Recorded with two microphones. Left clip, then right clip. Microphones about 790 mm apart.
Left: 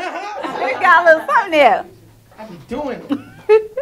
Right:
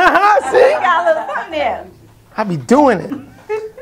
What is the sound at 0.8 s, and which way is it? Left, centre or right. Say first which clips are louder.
Speech: left 3 dB; left.